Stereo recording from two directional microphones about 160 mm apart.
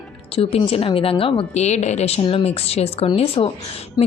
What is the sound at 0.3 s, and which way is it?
A woman's voice, 35° left (ahead or behind).